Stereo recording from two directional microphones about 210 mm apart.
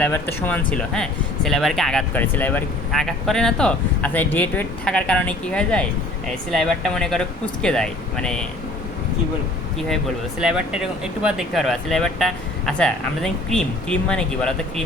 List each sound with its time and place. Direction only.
0.0 s speech: 10° left (ahead or behind)
10.4 s speech: 5° right (ahead or behind)